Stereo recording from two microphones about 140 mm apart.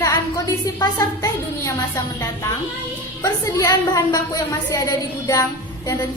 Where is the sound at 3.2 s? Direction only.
25° left (ahead or behind).